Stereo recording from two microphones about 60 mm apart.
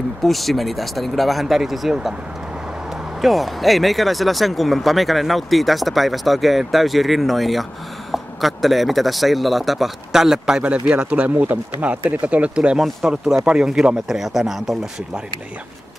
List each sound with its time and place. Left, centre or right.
0.2 s speech: centre
3.2 s speech: centre
12.7 s speech: centre